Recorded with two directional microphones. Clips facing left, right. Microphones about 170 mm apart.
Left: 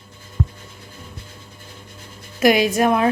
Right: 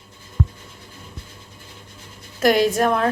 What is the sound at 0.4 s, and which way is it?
Music, 25° left (ahead or behind).